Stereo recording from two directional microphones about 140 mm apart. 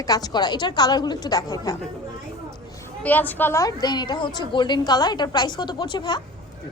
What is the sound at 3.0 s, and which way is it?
A woman's voice, 10° left (ahead or behind).